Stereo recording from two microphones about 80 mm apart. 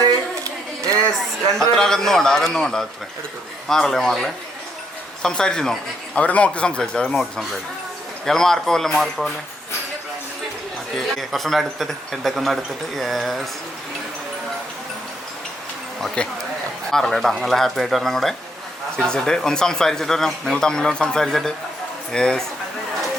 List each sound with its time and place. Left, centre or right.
0.0 s a sound: right
1.7 s speech: centre
10.9 s speech: centre
16.2 s speech: centre